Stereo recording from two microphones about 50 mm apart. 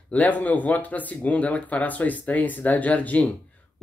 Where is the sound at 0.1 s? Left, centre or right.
Left.